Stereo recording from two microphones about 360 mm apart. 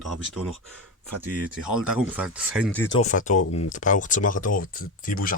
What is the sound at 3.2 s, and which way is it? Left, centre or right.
Speech, centre.